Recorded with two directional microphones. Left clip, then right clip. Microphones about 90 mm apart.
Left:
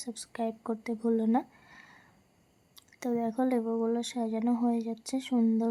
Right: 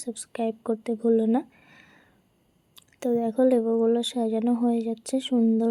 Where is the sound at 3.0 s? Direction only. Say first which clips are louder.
Right 8 dB; 30° right (ahead or behind).